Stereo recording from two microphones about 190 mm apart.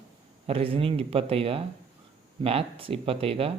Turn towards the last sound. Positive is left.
turn(degrees=-30)  # may be behind; listen again after turning